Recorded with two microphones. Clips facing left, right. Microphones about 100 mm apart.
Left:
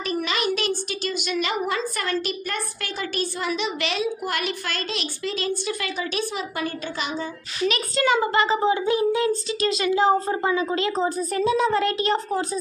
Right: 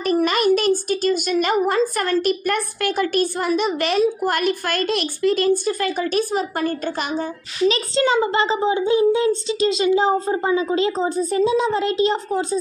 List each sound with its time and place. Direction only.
0.0 s a woman's voice: 50° right (ahead or behind)
7.6 s a child's voice: 25° right (ahead or behind)